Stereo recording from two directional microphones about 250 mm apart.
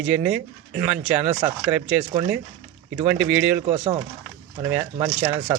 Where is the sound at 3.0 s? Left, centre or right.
Centre.